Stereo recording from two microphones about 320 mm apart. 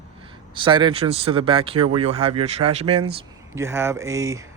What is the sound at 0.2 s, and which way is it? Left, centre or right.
Speech, centre.